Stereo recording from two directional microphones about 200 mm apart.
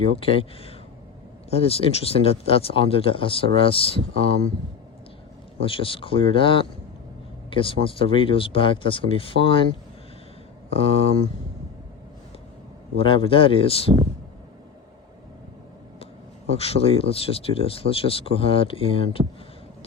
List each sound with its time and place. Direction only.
0.0 s speech: 30° left (ahead or behind)
5.5 s speech: 25° left (ahead or behind)
10.7 s speech: 30° left (ahead or behind)
13.0 s speech: 25° left (ahead or behind)
16.6 s speech: 30° left (ahead or behind)